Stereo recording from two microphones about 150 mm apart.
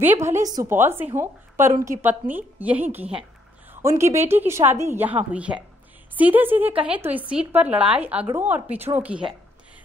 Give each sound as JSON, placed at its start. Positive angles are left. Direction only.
{"t": 0.0, "sound": "a woman's voice", "side_deg": -15}